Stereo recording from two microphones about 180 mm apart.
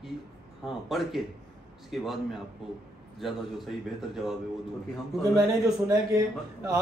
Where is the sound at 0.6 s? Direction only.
Centre (ahead or behind).